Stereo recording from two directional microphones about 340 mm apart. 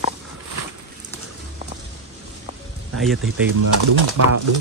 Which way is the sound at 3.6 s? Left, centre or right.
Right.